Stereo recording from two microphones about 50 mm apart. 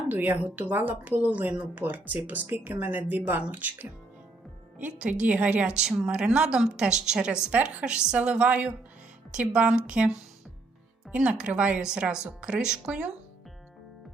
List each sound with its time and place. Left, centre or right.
0.1 s a woman's voice: right
4.9 s a woman's voice: right
11.1 s a woman's voice: right